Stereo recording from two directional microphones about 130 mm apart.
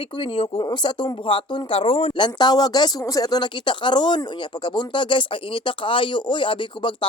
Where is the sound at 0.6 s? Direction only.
35° left (ahead or behind).